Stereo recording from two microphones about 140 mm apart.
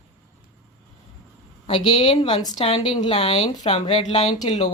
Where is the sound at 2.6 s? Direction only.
40° left (ahead or behind).